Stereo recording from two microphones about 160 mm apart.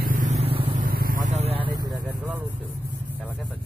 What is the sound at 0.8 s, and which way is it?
Vehicle, 65° right (ahead or behind).